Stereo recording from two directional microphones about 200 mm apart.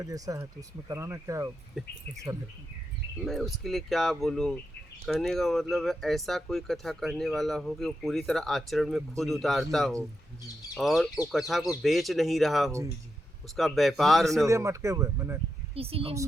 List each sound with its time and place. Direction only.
0.0 s speech: 15° right (ahead or behind)
1.7 s speech: centre (ahead or behind)
3.2 s speech: centre (ahead or behind)
14.4 s speech: 15° right (ahead or behind)
15.7 s a woman's voice: 30° right (ahead or behind)